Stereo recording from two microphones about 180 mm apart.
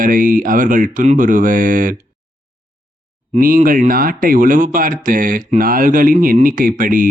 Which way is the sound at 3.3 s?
50° right (ahead or behind).